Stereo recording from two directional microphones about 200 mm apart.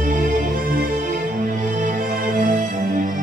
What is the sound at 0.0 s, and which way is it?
Music, 40° right (ahead or behind).